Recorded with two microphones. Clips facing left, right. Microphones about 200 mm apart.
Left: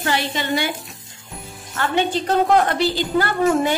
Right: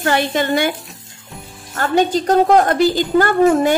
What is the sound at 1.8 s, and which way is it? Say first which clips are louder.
A woman's voice: right 5 dB; 40° right (ahead or behind).